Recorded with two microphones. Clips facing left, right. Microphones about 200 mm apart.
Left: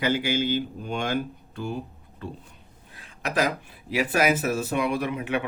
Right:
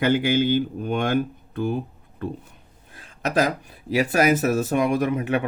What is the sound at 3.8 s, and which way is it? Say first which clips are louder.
Speech: right 4 dB; 40° right (ahead or behind).